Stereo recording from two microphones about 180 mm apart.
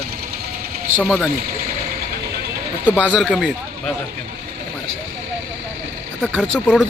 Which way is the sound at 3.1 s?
Centre (ahead or behind).